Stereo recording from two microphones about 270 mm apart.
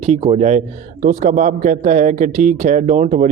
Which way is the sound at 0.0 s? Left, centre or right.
Right.